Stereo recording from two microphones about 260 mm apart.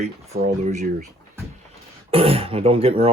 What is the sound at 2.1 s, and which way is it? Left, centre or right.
Speech, right.